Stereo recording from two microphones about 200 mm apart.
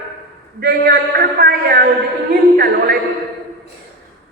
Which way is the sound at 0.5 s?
50° right (ahead or behind).